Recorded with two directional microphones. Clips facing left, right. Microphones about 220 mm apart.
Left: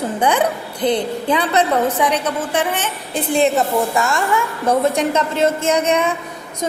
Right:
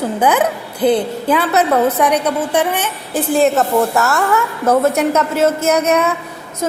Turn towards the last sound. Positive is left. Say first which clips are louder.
# right 2 dB
turn(degrees=-5)  # may be behind; listen again after turning